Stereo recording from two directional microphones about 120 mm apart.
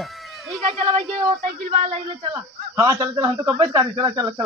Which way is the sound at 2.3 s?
25° right (ahead or behind).